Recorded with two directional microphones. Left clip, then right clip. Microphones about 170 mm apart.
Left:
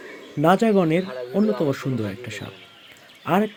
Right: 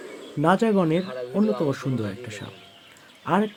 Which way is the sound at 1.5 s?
35° left (ahead or behind).